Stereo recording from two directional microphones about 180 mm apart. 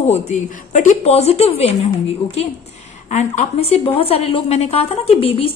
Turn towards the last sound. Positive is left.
turn(degrees=30)  # may be behind; listen again after turning